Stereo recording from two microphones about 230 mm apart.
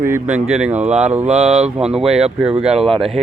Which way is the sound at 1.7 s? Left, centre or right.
Centre.